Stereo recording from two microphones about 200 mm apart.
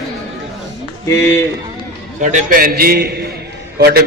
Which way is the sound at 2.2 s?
40° right (ahead or behind).